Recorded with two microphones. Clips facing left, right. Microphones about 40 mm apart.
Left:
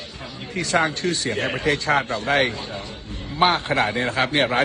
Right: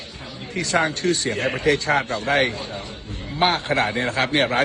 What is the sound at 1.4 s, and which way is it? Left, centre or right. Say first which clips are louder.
A man's voice: right 2 dB; left.